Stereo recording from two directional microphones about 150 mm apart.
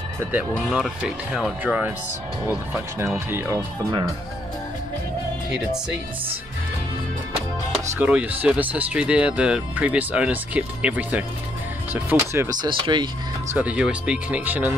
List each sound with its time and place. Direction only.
0.2 s speech: 10° right (ahead or behind)
3.3 s speech: 20° right (ahead or behind)
8.0 s speech: 10° right (ahead or behind)
12.6 s speech: 35° right (ahead or behind)
13.6 s speech: 5° right (ahead or behind)